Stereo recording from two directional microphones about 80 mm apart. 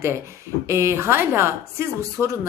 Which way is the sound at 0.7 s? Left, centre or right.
Right.